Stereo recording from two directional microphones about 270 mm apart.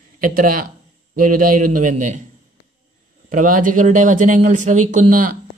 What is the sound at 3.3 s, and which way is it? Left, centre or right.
A man's voice, right.